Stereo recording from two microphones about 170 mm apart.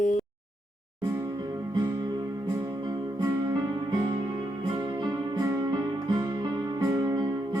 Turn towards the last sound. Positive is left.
turn(degrees=-20)  # may be behind; listen again after turning